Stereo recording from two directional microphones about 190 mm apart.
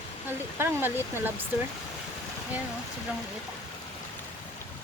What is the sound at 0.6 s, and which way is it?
Speech, 10° right (ahead or behind).